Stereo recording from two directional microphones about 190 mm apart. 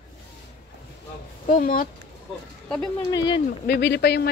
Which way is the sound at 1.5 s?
45° left (ahead or behind).